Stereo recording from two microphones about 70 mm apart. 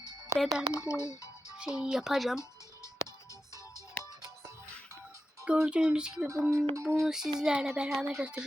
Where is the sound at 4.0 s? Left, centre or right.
Centre.